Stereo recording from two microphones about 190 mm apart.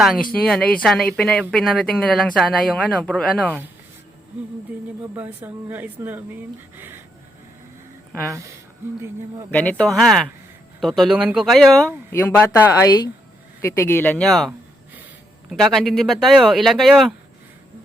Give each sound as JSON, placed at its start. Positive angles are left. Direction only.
{"t": 0.0, "sound": "speech", "side_deg": 0}
{"t": 5.1, "sound": "speech", "side_deg": -10}
{"t": 6.7, "sound": "a sound", "side_deg": -10}
{"t": 8.3, "sound": "speech", "side_deg": -15}
{"t": 9.5, "sound": "speech", "side_deg": 10}